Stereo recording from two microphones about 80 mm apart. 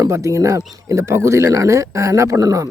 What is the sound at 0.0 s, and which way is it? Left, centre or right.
Speech, right.